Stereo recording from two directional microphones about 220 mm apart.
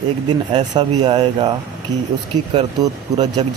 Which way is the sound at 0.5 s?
20° right (ahead or behind).